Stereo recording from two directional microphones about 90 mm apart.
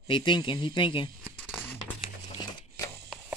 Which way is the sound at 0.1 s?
60° left (ahead or behind).